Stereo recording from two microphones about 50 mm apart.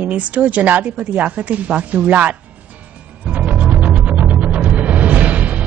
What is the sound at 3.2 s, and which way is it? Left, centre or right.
Music, right.